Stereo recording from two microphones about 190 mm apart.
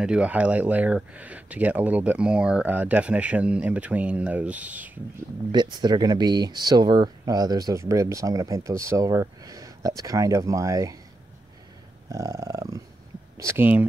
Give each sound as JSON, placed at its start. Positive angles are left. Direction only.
{"t": 0.0, "sound": "speech", "side_deg": -5}
{"t": 5.5, "sound": "speech", "side_deg": -25}
{"t": 12.1, "sound": "speech", "side_deg": -15}